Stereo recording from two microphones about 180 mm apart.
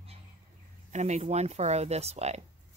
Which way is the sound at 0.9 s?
40° right (ahead or behind).